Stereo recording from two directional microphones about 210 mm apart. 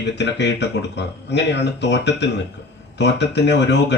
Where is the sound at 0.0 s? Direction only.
55° left (ahead or behind).